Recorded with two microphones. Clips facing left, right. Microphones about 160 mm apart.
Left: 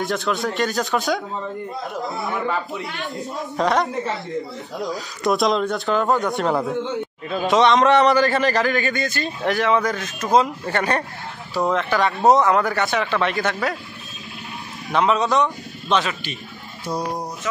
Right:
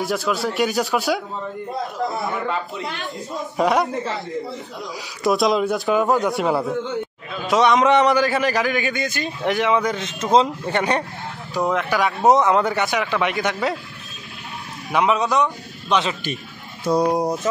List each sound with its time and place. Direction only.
0.0 s a man's voice: centre (ahead or behind)
5.2 s speech: centre (ahead or behind)
7.9 s a man's voice: 15° right (ahead or behind)
8.3 s a man's voice: 5° right (ahead or behind)
11.6 s a man's voice: 5° right (ahead or behind)
12.3 s speech: 20° right (ahead or behind)
14.9 s a man's voice: 15° right (ahead or behind)